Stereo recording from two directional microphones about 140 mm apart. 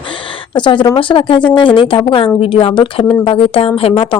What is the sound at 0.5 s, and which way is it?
Speech, 35° left (ahead or behind).